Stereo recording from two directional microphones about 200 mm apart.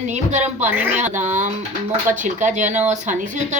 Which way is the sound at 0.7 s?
10° right (ahead or behind).